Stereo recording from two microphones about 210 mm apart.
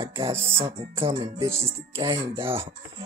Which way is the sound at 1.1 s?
15° right (ahead or behind).